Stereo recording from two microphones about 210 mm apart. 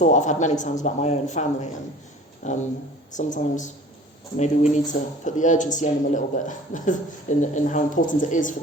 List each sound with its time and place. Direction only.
0.0 s speech: 35° left (ahead or behind)